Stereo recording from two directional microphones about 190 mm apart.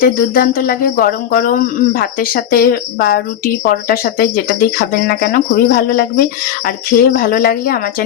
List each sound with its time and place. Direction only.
0.0 s speech: 50° left (ahead or behind)